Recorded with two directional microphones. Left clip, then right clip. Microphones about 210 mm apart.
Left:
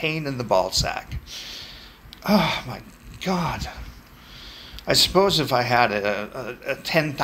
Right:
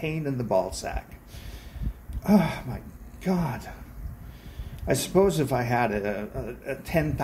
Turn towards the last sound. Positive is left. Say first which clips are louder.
# left 5 dB
turn(degrees=-10)  # may be behind; listen again after turning